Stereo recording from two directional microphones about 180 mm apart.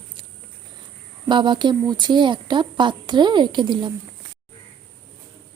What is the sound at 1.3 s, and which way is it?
Speech, 25° right (ahead or behind).